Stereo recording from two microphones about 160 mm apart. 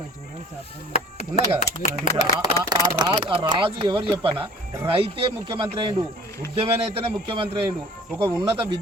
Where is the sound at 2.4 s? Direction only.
25° right (ahead or behind).